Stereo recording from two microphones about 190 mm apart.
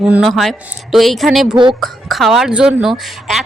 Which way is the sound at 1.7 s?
Centre (ahead or behind).